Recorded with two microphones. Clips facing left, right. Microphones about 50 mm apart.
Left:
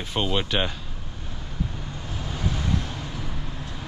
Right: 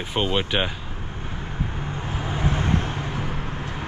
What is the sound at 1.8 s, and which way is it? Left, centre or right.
Vehicle, right.